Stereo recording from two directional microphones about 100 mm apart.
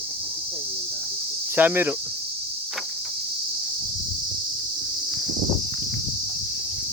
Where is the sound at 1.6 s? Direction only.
20° right (ahead or behind).